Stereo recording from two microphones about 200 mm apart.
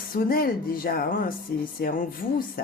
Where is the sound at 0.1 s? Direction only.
45° left (ahead or behind).